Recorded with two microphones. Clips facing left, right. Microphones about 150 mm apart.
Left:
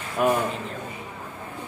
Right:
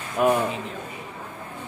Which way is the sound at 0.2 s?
Centre (ahead or behind).